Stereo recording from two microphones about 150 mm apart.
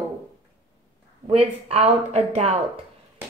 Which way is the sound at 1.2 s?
40° right (ahead or behind).